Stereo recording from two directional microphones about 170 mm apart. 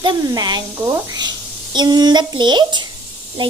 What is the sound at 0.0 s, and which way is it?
Speech, 25° right (ahead or behind).